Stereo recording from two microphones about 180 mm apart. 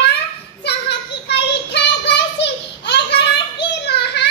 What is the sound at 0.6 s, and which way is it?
Child singing, 65° left (ahead or behind).